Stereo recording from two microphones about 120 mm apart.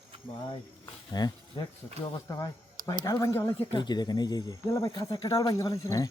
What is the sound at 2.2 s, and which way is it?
Speech, 30° left (ahead or behind).